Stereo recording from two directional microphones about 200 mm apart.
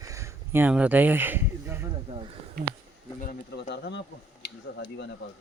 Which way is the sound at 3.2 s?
50° left (ahead or behind).